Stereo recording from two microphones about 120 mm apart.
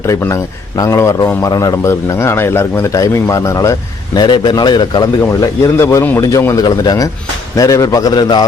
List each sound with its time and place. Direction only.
0.8 s a man's voice: 25° left (ahead or behind)
5.8 s a man's voice: 20° left (ahead or behind); by 8.4 s 35° left (ahead or behind)